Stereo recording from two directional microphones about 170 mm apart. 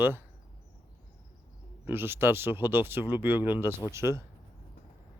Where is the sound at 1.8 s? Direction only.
15° right (ahead or behind).